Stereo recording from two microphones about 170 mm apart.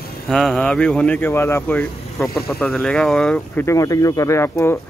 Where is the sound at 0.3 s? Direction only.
Centre (ahead or behind).